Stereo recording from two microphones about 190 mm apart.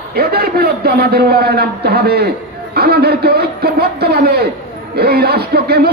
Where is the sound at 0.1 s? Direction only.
55° right (ahead or behind).